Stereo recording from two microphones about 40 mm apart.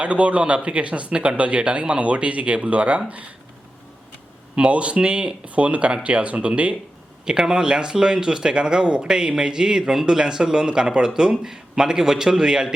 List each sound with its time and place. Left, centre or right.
0.0 s speech: right
4.5 s speech: right
7.3 s speech: right